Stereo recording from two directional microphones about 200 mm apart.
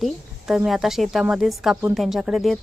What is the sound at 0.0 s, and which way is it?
A woman's voice, centre (ahead or behind).